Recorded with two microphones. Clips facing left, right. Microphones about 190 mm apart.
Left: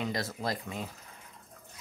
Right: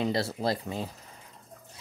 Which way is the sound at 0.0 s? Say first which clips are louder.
Right 5 dB; 30° right (ahead or behind).